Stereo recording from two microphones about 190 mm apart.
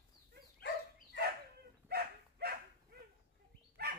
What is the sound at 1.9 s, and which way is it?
Dog, 55° right (ahead or behind).